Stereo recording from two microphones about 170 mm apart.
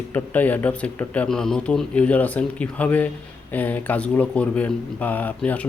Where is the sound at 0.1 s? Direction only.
10° left (ahead or behind).